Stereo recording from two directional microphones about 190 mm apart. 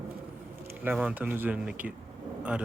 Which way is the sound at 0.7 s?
10° right (ahead or behind).